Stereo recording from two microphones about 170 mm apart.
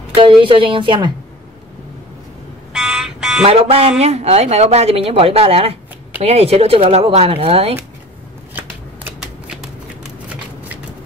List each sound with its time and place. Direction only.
0.1 s a woman's voice: 30° right (ahead or behind)
2.7 s buzzer: centre (ahead or behind)
3.4 s speech: 35° right (ahead or behind)
8.5 s shuffling cards: 10° right (ahead or behind)